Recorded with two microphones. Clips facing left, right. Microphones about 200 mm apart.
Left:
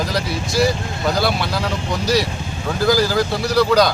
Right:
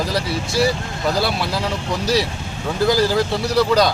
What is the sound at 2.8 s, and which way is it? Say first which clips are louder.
Speech: left 1 dB; centre (ahead or behind).